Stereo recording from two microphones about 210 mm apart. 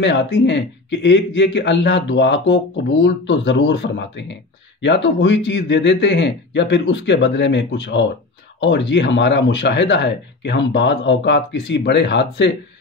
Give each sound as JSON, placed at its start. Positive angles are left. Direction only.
{"t": 0.0, "sound": "a man's voice", "side_deg": 60}